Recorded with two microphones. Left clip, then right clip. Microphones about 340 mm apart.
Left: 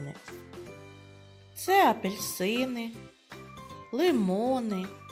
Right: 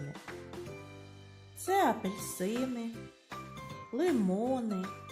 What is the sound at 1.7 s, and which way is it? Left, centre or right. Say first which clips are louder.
Speech: left 6 dB; centre.